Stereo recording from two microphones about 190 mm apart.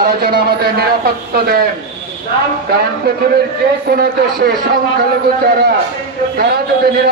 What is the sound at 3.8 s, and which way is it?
Speech, 55° right (ahead or behind).